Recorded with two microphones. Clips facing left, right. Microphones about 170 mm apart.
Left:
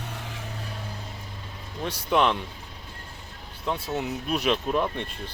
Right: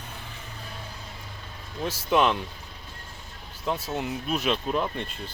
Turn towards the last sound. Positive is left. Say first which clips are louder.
# left 2 dB
turn(degrees=0)  # may be behind; listen again after turning